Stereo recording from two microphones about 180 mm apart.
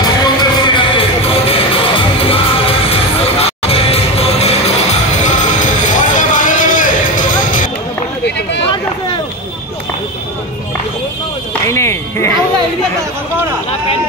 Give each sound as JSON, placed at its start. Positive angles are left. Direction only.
{"t": 0.0, "sound": "music", "side_deg": 20}
{"t": 11.6, "sound": "music", "side_deg": 15}